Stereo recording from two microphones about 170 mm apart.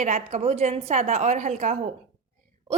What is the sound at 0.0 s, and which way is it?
A woman's voice, 45° right (ahead or behind).